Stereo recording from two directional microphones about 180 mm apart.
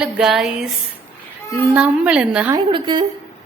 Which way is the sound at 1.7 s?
5° right (ahead or behind).